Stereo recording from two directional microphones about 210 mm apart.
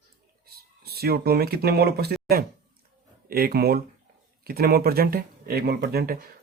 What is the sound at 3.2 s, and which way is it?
Speech, 45° right (ahead or behind).